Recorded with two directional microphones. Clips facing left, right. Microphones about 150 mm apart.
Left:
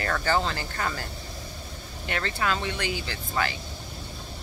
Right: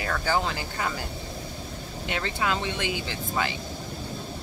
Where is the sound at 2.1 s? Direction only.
15° right (ahead or behind).